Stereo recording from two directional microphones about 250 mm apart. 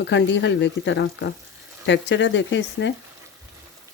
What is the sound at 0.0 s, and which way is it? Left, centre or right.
Speech, left.